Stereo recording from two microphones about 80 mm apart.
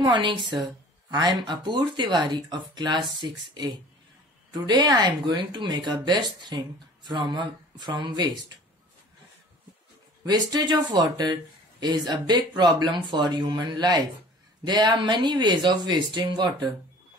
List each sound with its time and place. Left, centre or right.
0.0 s speech: right
1.1 s speech: right
4.5 s speech: right
5.7 s speech: right
10.2 s speech: right